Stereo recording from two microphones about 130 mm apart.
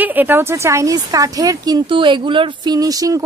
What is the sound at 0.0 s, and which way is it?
Speech, 15° right (ahead or behind).